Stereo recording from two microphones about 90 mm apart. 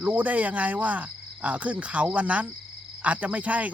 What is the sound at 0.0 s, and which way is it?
Cricket, 20° right (ahead or behind).